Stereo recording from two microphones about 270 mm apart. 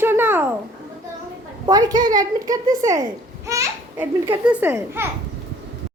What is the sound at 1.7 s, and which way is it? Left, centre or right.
A child's voice, centre.